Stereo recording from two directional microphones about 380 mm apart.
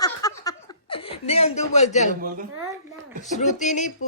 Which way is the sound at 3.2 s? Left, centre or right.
Centre.